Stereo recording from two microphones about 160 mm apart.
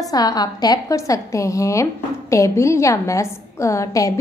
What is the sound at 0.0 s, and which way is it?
A woman's voice, 25° left (ahead or behind).